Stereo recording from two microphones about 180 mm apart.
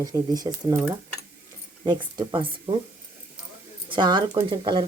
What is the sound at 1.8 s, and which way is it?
Speech, 25° right (ahead or behind).